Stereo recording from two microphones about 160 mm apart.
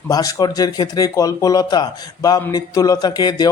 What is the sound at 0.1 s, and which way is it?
Speech, 20° left (ahead or behind).